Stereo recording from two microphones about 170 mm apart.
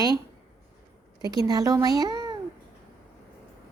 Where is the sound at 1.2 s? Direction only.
20° right (ahead or behind).